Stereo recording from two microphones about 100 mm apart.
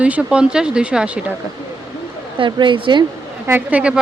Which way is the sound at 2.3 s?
55° right (ahead or behind).